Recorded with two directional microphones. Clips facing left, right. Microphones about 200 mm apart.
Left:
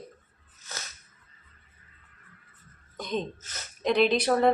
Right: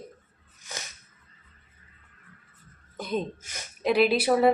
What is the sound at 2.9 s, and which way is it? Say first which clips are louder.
Speech: right 2 dB; 5° right (ahead or behind).